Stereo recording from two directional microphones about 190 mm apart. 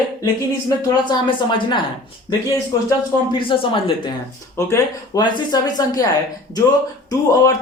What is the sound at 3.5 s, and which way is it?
Speech, 25° left (ahead or behind).